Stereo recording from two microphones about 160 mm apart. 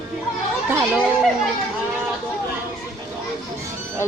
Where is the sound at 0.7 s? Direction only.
15° right (ahead or behind).